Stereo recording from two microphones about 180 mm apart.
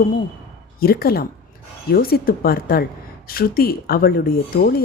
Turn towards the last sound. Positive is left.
turn(degrees=55)  # may be behind; listen again after turning